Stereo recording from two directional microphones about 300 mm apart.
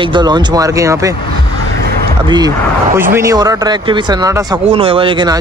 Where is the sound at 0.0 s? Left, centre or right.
Centre.